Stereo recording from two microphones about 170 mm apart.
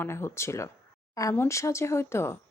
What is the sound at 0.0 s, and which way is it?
Speech, 15° left (ahead or behind).